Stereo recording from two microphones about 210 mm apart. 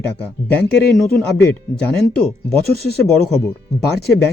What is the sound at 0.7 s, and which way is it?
Speech, 50° left (ahead or behind).